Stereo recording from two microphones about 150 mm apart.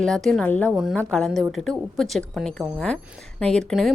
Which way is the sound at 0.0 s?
5° left (ahead or behind).